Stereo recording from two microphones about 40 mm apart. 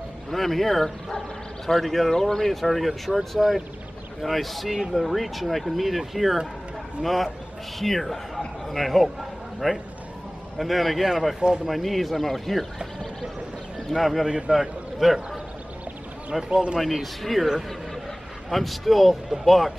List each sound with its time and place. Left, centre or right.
0.3 s speech: centre
2.9 s speech: centre
3.3 s a man's voice: centre
11.3 s speech: centre
11.6 s speech: centre
13.8 s a man's voice: centre
16.3 s speech: centre
18.5 s speech: centre